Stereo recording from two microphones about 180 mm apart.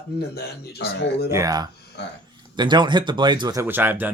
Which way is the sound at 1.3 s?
20° right (ahead or behind).